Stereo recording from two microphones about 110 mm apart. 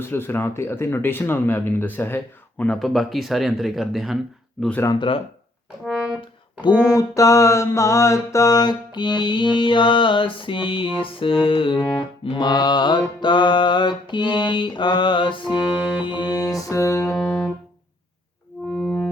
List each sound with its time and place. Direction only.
0.0 s speech: 20° left (ahead or behind)
2.6 s speech: centre (ahead or behind)
4.9 s mantra: 50° left (ahead or behind)
5.8 s brass instrument: 5° right (ahead or behind)
6.9 s mantra: 30° left (ahead or behind)
18.7 s music: 5° left (ahead or behind)